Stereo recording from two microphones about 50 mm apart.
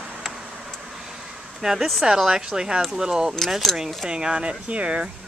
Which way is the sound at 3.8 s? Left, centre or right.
Centre.